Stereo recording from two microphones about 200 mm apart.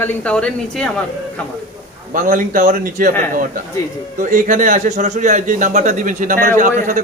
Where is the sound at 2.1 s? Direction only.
40° right (ahead or behind).